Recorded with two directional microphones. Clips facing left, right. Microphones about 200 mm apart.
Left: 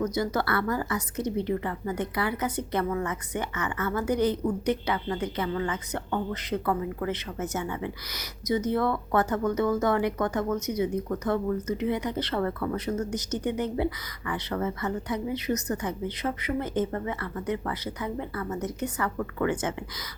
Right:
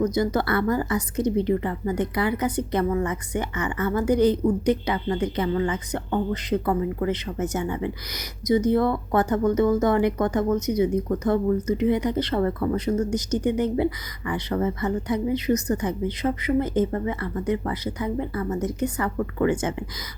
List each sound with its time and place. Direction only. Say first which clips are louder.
0.0 s a woman's voice: right 5 dB; 15° right (ahead or behind)